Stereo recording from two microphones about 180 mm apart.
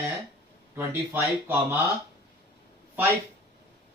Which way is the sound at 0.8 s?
10° right (ahead or behind).